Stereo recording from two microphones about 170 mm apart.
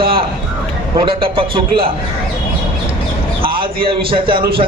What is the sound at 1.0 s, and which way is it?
Speech, 30° right (ahead or behind).